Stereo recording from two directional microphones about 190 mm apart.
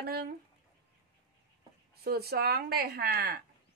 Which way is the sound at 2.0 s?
55° right (ahead or behind).